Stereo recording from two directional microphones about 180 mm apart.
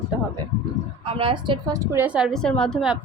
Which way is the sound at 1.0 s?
30° right (ahead or behind).